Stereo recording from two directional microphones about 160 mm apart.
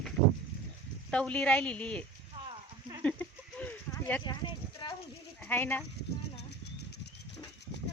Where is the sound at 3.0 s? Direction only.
10° left (ahead or behind).